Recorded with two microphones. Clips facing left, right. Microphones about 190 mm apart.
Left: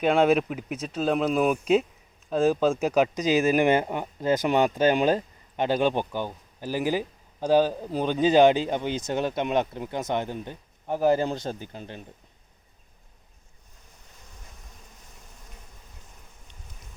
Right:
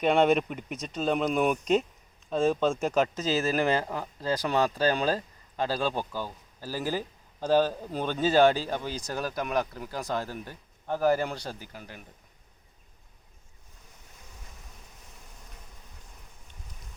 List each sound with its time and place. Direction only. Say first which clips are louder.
0.0 s speech: left 2 dB; centre (ahead or behind); by 12.0 s 25° left (ahead or behind)